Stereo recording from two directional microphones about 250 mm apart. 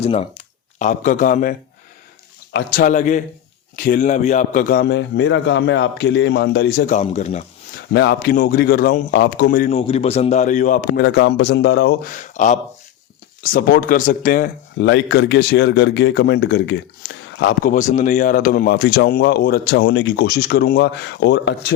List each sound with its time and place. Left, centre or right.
0.0 s a man's voice: left
6.8 s speech: left
7.9 s speech: left
9.7 s speech: left
12.1 s speech: left
14.8 s a man's voice: left
17.7 s a man's voice: left